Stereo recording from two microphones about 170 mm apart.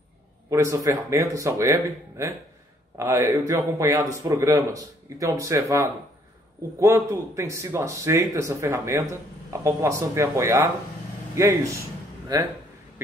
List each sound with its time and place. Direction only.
0.5 s a man's voice: 20° right (ahead or behind)